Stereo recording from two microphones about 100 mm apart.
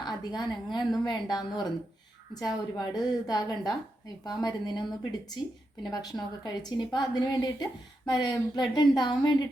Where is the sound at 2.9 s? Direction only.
40° left (ahead or behind).